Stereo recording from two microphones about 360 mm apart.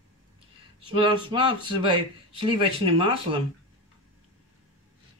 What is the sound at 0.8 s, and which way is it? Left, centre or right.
Speech, centre.